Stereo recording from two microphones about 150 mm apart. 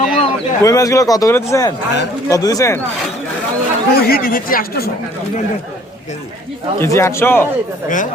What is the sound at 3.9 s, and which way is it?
Speech, 90° left.